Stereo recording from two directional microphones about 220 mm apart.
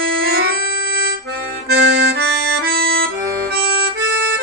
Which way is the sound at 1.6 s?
45° right (ahead or behind).